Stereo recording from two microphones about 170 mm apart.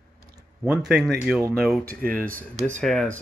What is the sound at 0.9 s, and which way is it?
Speech, centre (ahead or behind).